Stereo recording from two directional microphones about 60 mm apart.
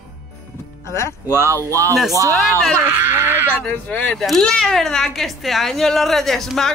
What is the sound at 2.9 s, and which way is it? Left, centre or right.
Speech, right.